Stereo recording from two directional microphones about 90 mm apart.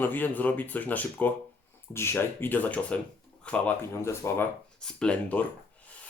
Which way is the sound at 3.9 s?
30° left (ahead or behind).